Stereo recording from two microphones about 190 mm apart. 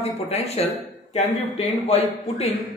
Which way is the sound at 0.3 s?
35° left (ahead or behind).